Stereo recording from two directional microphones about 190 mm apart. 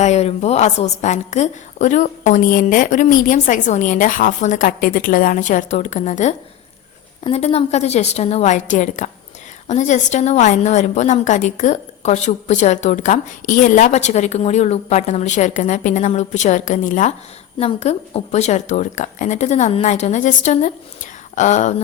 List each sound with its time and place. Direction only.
0.0 s a woman's voice: 35° left (ahead or behind)